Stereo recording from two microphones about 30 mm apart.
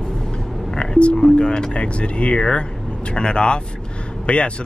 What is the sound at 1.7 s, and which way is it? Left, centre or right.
Speech, left.